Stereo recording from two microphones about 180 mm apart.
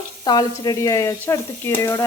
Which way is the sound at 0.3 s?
20° left (ahead or behind).